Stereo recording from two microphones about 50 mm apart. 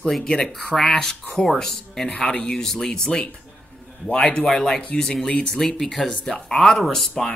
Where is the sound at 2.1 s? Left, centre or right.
Left.